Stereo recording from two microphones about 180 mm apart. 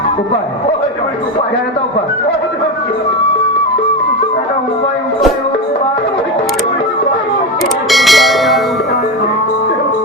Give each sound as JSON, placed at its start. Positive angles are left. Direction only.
{"t": 7.9, "sound": "bell", "side_deg": 0}